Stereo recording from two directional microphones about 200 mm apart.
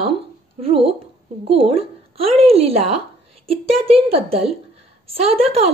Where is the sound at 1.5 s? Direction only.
30° right (ahead or behind).